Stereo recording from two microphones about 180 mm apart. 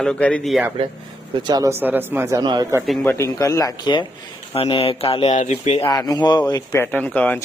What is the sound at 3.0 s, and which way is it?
Speech, 15° left (ahead or behind).